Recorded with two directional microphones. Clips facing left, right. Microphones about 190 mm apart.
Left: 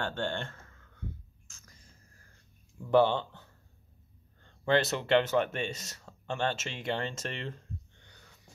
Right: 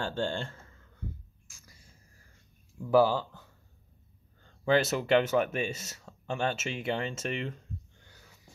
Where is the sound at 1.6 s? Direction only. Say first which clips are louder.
Even; 40° left (ahead or behind).